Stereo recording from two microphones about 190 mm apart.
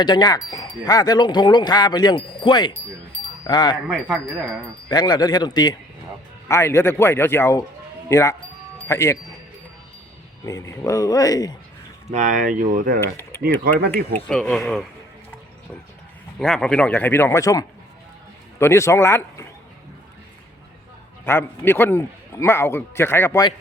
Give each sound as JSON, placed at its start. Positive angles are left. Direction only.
{"t": 0.0, "sound": "speech", "side_deg": 20}
{"t": 3.8, "sound": "wind chime", "side_deg": -5}
{"t": 4.9, "sound": "a man's voice", "side_deg": 20}
{"t": 10.4, "sound": "a man's voice", "side_deg": 15}
{"t": 12.0, "sound": "speech", "side_deg": -40}
{"t": 13.0, "sound": "speech", "side_deg": 10}
{"t": 16.4, "sound": "a man's voice", "side_deg": 5}
{"t": 21.2, "sound": "a man's voice", "side_deg": 10}